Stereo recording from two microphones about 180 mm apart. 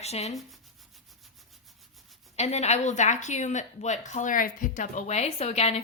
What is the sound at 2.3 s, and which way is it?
Speech, 40° left (ahead or behind).